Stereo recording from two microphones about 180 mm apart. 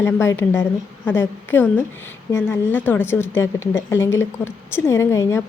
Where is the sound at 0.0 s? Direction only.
15° left (ahead or behind).